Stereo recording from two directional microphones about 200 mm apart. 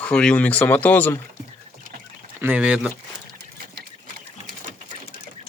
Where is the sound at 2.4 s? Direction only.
5° right (ahead or behind).